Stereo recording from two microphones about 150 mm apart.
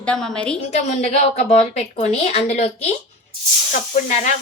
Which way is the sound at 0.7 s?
45° left (ahead or behind).